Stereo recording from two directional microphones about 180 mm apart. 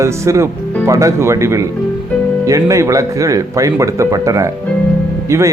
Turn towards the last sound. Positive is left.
turn(degrees=-15)  # may be behind; listen again after turning